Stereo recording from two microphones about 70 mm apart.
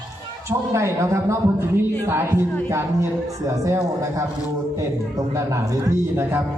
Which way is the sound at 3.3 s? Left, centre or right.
Right.